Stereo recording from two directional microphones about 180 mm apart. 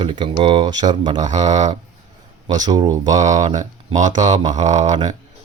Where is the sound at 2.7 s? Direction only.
20° right (ahead or behind).